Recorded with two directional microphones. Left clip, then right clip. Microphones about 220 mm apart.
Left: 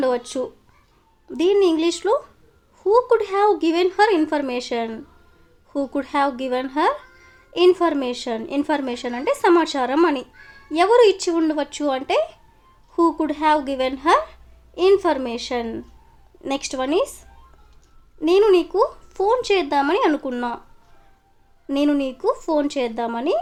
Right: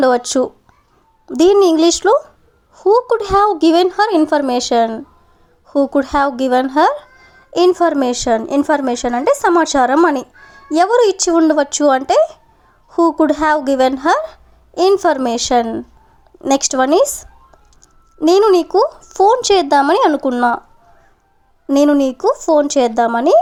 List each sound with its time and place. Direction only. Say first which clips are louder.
0.0 s a woman's voice: right 9 dB; 30° right (ahead or behind)
21.7 s a woman's voice: right 9 dB; 30° right (ahead or behind)